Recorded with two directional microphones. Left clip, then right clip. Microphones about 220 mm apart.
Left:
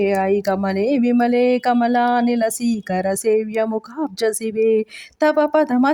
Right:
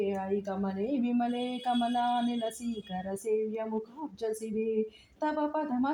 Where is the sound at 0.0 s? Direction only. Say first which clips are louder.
Left 14 dB; 45° left (ahead or behind).